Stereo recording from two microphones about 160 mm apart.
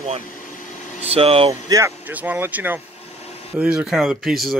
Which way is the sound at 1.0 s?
40° right (ahead or behind).